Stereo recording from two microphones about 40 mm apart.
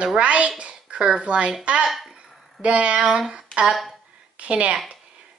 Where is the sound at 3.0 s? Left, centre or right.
Centre.